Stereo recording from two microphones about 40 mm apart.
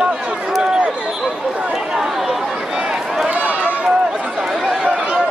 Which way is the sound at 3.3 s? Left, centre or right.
Right.